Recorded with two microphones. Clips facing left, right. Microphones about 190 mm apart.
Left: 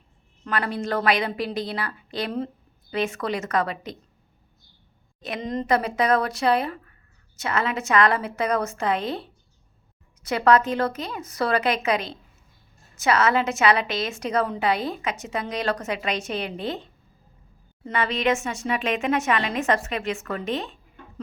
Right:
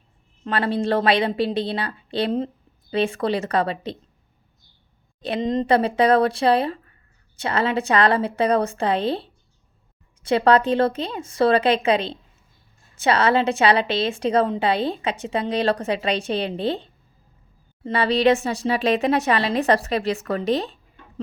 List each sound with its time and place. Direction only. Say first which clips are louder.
0.4 s a woman's voice: right 5 dB; 30° right (ahead or behind)
5.2 s a woman's voice: right 6 dB; 25° right (ahead or behind)